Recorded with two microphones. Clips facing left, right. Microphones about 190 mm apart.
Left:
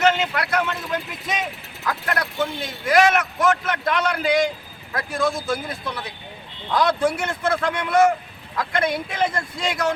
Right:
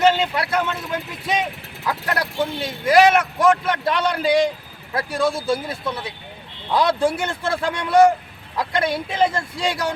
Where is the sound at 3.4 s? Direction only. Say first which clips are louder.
Right 3 dB; 30° right (ahead or behind).